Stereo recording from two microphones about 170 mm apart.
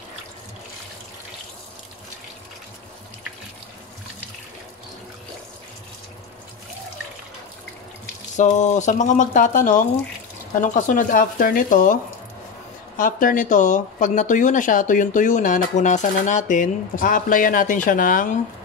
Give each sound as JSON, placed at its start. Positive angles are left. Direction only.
{"t": 8.4, "sound": "speech", "side_deg": 45}